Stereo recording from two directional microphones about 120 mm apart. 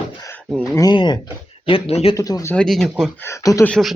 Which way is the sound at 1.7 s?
50° left (ahead or behind).